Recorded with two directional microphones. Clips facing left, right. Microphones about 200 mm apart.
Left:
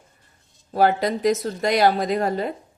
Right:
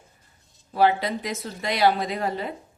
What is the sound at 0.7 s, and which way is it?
Speech, 45° left (ahead or behind).